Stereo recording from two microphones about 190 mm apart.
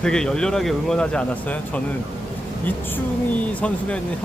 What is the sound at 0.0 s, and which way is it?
Speech, 5° left (ahead or behind).